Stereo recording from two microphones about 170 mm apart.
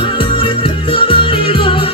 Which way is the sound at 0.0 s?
30° left (ahead or behind).